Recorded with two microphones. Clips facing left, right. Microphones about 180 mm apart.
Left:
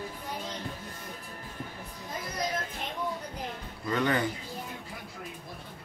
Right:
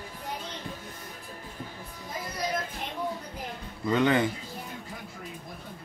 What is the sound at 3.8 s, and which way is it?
Speech, 20° right (ahead or behind).